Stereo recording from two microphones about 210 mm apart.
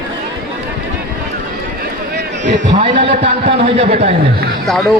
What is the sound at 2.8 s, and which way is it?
A man's voice, 25° right (ahead or behind).